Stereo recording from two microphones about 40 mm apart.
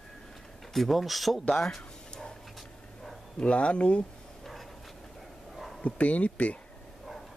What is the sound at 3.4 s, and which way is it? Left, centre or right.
Speech, left.